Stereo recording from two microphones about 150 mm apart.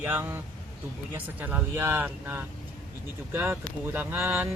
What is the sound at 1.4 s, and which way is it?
Speech, 15° right (ahead or behind).